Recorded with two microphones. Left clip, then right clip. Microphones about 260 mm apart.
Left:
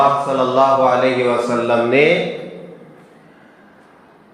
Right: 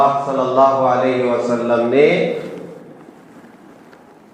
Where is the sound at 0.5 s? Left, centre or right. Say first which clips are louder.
Even; left.